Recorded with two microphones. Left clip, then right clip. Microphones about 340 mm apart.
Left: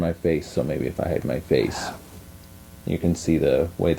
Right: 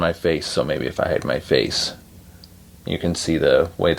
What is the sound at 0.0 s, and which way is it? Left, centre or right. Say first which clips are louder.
Speech: right 4 dB; right.